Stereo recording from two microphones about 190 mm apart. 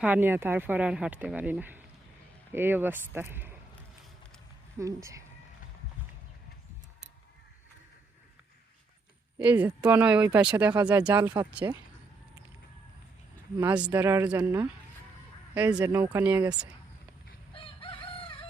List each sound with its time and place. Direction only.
0.0 s speech: 10° right (ahead or behind)
4.8 s speech: 15° right (ahead or behind)
9.4 s speech: 5° right (ahead or behind)
13.6 s speech: 10° right (ahead or behind)
17.5 s crowing: 30° left (ahead or behind)